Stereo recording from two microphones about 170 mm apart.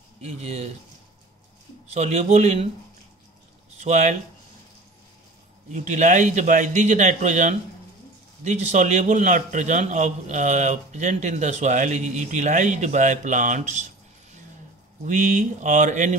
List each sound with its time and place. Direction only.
0.4 s speech: 40° right (ahead or behind)
2.0 s a man's voice: 45° right (ahead or behind)
3.8 s a man's voice: 45° right (ahead or behind)
5.7 s a man's voice: 45° right (ahead or behind)